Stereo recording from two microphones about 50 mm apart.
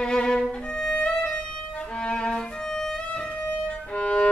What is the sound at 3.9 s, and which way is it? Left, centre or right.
Music, left.